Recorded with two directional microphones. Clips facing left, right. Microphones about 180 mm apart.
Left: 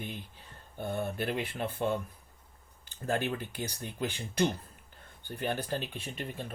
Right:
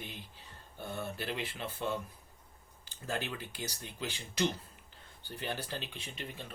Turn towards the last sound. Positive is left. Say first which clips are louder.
# left 5 dB
turn(degrees=50)  # may be behind; listen again after turning